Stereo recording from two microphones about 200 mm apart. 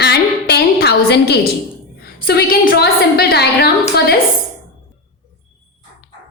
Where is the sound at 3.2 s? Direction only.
50° left (ahead or behind).